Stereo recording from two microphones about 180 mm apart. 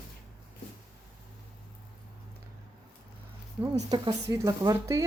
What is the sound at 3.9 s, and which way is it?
Speech, 20° right (ahead or behind).